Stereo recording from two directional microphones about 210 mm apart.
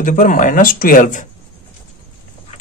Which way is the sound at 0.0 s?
40° left (ahead or behind).